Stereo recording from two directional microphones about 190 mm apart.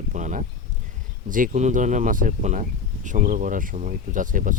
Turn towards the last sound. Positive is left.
turn(degrees=-45)  # may be behind; listen again after turning